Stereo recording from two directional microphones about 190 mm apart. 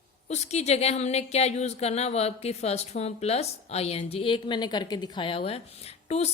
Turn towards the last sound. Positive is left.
turn(degrees=35)  # may be behind; listen again after turning